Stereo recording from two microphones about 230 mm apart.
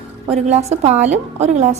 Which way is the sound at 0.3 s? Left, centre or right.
Right.